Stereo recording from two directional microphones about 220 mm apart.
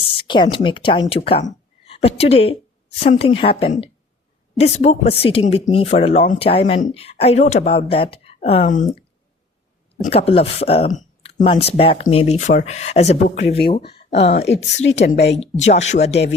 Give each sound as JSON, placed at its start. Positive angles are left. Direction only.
{"t": 0.2, "sound": "a woman's voice", "side_deg": 20}
{"t": 10.0, "sound": "a woman's voice", "side_deg": 25}
{"t": 14.4, "sound": "speech", "side_deg": 50}
{"t": 15.4, "sound": "a woman's voice", "side_deg": 30}